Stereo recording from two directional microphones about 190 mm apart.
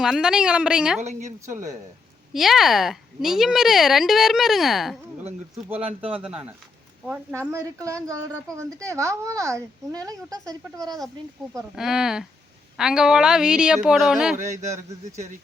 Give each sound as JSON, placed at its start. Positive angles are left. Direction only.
{"t": 0.0, "sound": "speech", "side_deg": -5}
{"t": 1.0, "sound": "a woman's voice", "side_deg": -40}
{"t": 2.3, "sound": "speech", "side_deg": 0}
{"t": 5.7, "sound": "speech", "side_deg": -30}
{"t": 6.2, "sound": "speech", "side_deg": -5}
{"t": 7.3, "sound": "a woman's voice", "side_deg": -15}
{"t": 11.7, "sound": "speech", "side_deg": 0}